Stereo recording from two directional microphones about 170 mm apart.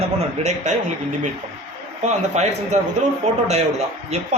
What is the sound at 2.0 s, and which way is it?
A man's voice, 40° right (ahead or behind).